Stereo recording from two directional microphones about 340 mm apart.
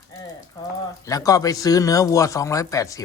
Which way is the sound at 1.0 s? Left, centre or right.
Centre.